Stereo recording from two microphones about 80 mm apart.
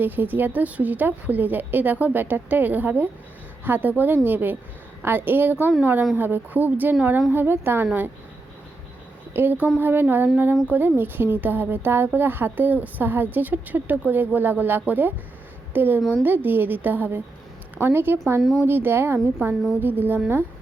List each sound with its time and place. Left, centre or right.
0.0 s speech: right
9.3 s speech: right